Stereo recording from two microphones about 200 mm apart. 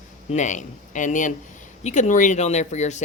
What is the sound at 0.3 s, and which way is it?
Speech, 35° left (ahead or behind).